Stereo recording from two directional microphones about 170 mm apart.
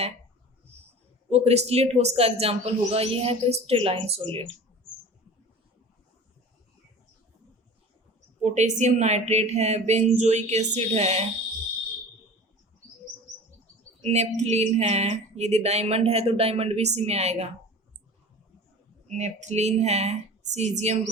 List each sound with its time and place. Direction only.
1.3 s speech: 40° right (ahead or behind)
8.4 s speech: 45° right (ahead or behind)
14.0 s speech: 40° right (ahead or behind)
19.0 s speech: 45° right (ahead or behind)